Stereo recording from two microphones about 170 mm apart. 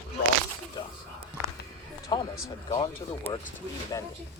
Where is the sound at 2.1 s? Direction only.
25° left (ahead or behind).